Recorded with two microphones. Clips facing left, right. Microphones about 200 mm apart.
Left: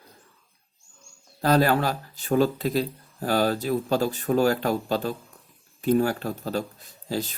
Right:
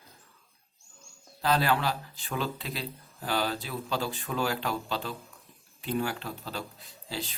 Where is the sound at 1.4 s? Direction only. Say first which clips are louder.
Left 6 dB; 45° left (ahead or behind).